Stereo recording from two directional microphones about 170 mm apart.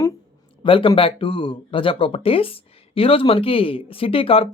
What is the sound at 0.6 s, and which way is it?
Speech, 30° left (ahead or behind).